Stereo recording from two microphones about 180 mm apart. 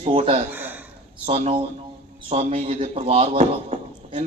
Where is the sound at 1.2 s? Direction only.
30° right (ahead or behind).